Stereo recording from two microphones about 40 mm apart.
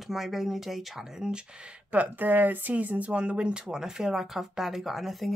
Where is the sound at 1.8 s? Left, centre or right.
Right.